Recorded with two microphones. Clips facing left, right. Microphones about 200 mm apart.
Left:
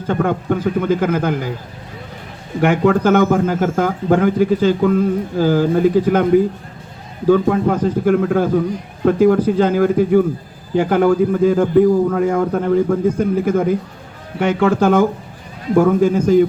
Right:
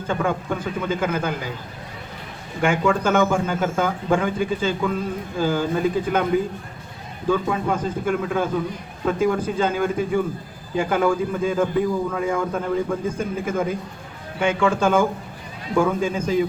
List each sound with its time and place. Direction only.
0.1 s a man's voice: 60° left (ahead or behind)
2.6 s a man's voice: 65° left (ahead or behind)
7.3 s a man's voice: 55° left (ahead or behind)